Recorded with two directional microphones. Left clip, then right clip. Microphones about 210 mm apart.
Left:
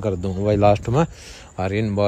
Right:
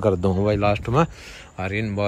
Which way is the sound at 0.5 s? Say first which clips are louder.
Left 8 dB; 15° left (ahead or behind).